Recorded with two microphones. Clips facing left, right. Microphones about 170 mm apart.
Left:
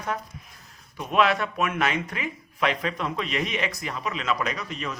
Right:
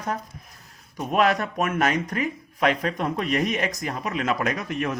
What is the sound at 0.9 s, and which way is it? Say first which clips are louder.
Speech: right 1 dB; 45° right (ahead or behind).